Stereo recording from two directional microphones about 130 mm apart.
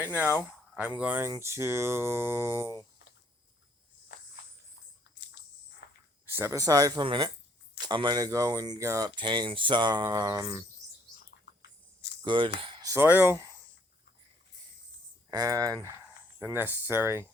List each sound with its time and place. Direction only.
0.0 s speech: 10° right (ahead or behind)
6.2 s speech: 15° right (ahead or behind)
7.0 s speech: 40° right (ahead or behind)
9.2 s speech: 35° right (ahead or behind)
12.2 s speech: 40° right (ahead or behind)
12.8 s a sound: 25° right (ahead or behind)
13.1 s speech: 15° right (ahead or behind)
15.3 s speech: 30° right (ahead or behind)
16.4 s speech: 15° right (ahead or behind)